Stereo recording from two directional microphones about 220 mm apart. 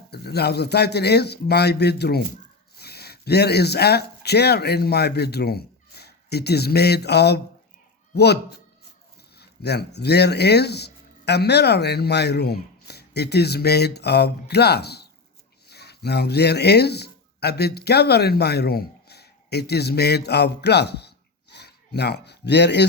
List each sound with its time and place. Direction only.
0.1 s a man's voice: 45° left (ahead or behind)
9.4 s speech: 45° left (ahead or behind)